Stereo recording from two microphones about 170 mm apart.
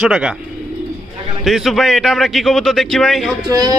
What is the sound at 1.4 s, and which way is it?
Speech, centre (ahead or behind).